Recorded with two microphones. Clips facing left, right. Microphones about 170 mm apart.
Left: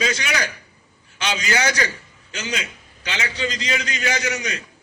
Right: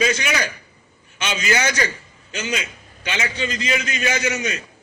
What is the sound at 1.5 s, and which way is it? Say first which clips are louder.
Speech: right 1 dB; 25° right (ahead or behind).